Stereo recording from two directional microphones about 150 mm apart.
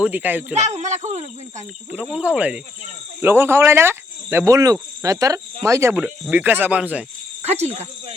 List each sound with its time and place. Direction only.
0.0 s speech: 10° right (ahead or behind)
0.6 s speech: 50° right (ahead or behind)
2.1 s speech: 10° right (ahead or behind)
7.4 s speech: 45° right (ahead or behind)